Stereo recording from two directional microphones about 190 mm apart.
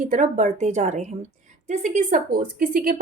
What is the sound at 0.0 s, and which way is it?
A woman's voice, 45° right (ahead or behind).